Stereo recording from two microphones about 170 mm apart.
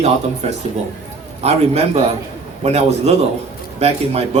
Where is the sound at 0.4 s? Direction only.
40° right (ahead or behind).